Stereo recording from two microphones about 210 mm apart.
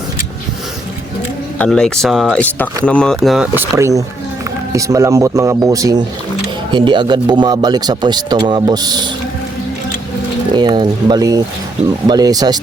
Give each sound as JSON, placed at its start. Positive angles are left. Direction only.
{"t": 1.5, "sound": "speech", "side_deg": 5}
{"t": 10.5, "sound": "speech", "side_deg": -20}